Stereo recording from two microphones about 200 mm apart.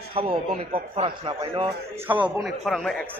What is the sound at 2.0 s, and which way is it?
Speech, 5° right (ahead or behind).